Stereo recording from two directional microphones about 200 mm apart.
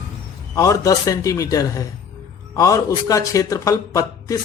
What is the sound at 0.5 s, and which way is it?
Speech, 15° left (ahead or behind).